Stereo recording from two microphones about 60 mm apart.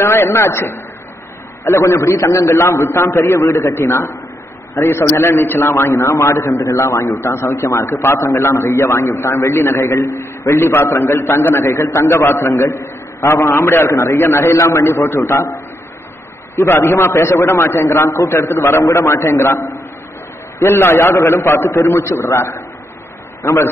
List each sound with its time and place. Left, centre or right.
0.0 s a man's voice: left
7.2 s a man's voice: left